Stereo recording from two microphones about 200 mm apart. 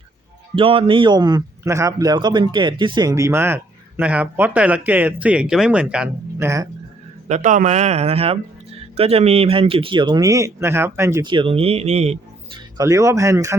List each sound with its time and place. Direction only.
0.5 s a man's voice: 25° right (ahead or behind)
7.3 s speech: 35° right (ahead or behind)
12.7 s a man's voice: 15° right (ahead or behind)